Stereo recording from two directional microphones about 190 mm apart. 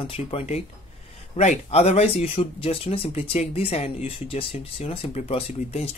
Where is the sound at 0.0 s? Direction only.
30° left (ahead or behind).